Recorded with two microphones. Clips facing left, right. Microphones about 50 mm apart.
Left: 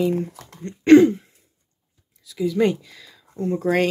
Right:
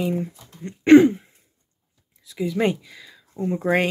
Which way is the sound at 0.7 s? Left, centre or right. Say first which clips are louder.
Even; centre.